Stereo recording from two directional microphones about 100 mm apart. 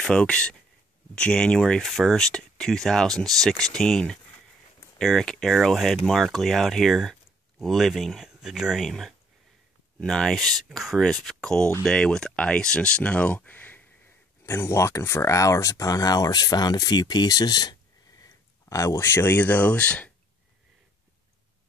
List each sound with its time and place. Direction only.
0.0 s speech: 10° left (ahead or behind)